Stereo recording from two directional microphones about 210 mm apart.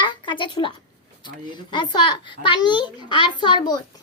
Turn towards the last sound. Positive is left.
turn(degrees=20)  # may be behind; listen again after turning